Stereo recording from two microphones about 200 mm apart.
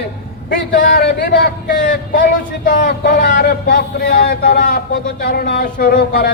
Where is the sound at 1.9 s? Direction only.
45° left (ahead or behind).